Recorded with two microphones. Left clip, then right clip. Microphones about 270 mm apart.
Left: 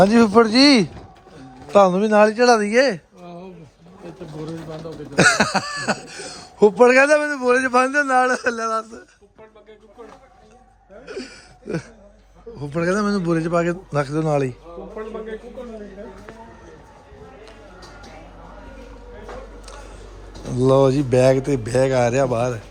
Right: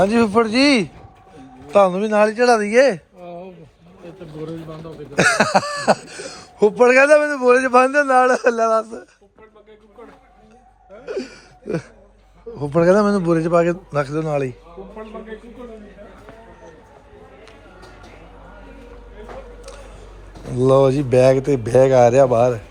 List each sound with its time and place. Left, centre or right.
0.0 s a man's voice: centre
5.1 s speech: centre
11.0 s a sound: centre
12.5 s speech: centre
20.5 s a man's voice: centre